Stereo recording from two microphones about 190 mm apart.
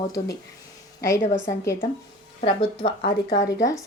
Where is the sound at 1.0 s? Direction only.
15° left (ahead or behind).